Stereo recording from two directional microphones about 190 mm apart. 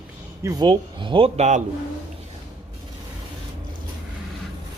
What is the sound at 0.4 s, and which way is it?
Speech, 20° right (ahead or behind).